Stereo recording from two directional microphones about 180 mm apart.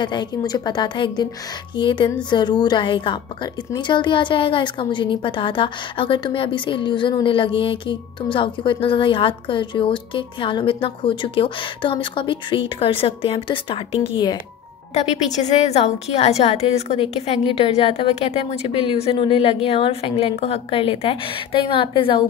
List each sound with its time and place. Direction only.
0.0 s a woman's voice: 25° left (ahead or behind)
15.0 s a woman's voice: 35° left (ahead or behind)